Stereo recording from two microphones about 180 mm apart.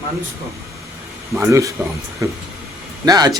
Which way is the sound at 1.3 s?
15° right (ahead or behind).